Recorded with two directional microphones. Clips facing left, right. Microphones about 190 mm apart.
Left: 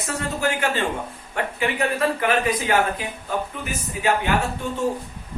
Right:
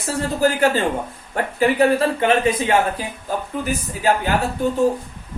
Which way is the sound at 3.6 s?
35° right (ahead or behind).